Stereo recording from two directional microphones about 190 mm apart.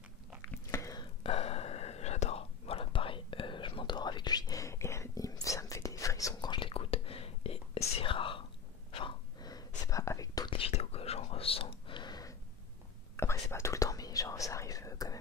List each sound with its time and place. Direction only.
0.5 s chewing: 15° left (ahead or behind)
1.2 s whispering: 30° left (ahead or behind)
8.9 s a sound: 25° left (ahead or behind)
9.8 s whispering: 15° left (ahead or behind)